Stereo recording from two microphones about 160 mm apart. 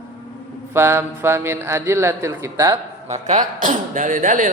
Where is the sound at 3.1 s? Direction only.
50° right (ahead or behind).